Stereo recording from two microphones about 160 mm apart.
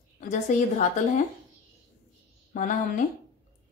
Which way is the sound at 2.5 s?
55° left (ahead or behind).